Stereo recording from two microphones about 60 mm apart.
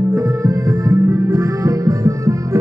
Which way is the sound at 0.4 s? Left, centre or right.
Right.